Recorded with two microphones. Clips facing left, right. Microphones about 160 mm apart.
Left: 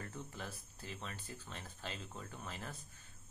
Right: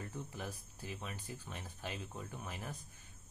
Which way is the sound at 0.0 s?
15° right (ahead or behind).